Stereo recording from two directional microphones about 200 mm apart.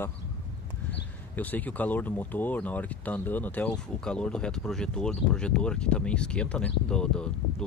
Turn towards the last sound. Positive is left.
turn(degrees=5)  # may be behind; listen again after turning